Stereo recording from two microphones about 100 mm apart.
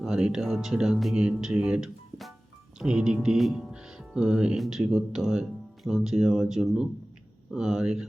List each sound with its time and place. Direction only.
0.0 s speech: 10° right (ahead or behind)